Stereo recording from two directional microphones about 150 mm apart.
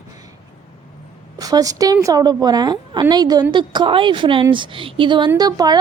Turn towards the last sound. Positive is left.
turn(degrees=-25)  # may be behind; listen again after turning